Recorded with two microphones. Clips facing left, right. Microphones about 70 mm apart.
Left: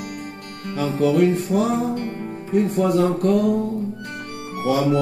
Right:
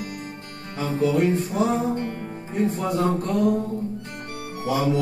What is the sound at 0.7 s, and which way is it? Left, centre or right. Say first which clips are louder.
Music: left 4 dB; left.